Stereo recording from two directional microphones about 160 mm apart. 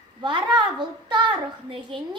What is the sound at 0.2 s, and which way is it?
A woman's voice, 30° right (ahead or behind).